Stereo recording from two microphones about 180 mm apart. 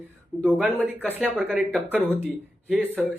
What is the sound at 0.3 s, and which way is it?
Speech, 5° right (ahead or behind).